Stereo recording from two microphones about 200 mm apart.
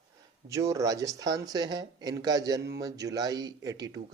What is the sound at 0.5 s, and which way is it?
Speech, 15° right (ahead or behind).